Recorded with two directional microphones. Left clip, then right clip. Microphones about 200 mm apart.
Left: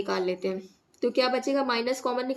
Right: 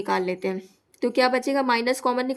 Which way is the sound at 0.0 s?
50° right (ahead or behind).